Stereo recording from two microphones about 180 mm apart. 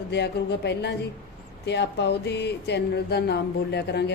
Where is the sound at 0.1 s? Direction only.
70° left (ahead or behind).